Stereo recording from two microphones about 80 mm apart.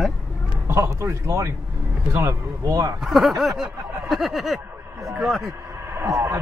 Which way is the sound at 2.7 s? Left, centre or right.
Right.